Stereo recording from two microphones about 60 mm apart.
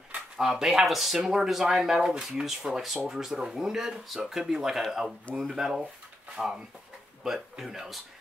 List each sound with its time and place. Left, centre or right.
0.4 s speech: centre